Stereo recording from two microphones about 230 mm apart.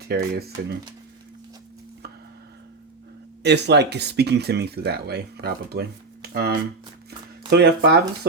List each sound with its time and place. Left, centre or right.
0.1 s speech: right
3.4 s speech: right